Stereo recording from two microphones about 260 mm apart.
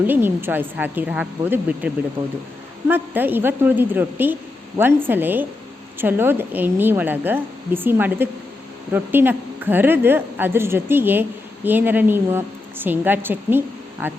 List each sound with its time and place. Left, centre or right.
0.1 s speech: centre
2.2 s speech: right
2.8 s speech: centre